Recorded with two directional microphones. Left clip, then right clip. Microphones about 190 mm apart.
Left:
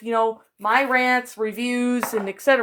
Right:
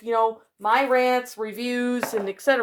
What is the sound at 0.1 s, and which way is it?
A woman's voice, 35° left (ahead or behind).